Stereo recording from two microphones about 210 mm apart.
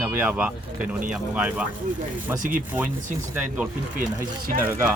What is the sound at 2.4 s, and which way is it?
Speech, 40° right (ahead or behind).